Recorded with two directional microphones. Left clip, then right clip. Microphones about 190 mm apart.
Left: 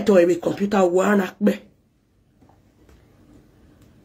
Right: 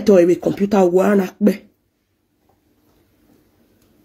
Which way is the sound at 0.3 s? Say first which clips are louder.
Right 4 dB; 45° right (ahead or behind).